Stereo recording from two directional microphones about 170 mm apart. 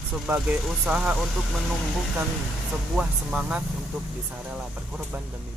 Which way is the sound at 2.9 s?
5° right (ahead or behind).